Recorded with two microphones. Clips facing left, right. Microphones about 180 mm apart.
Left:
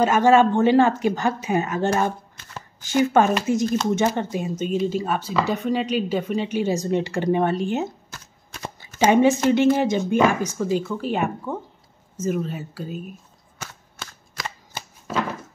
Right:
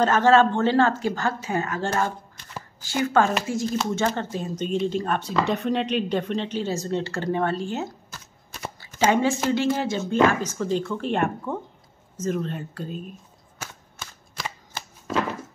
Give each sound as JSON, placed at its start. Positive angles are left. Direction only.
{"t": 0.0, "sound": "speech", "side_deg": 15}
{"t": 8.7, "sound": "shuffling cards", "side_deg": 20}
{"t": 9.5, "sound": "speech", "side_deg": 20}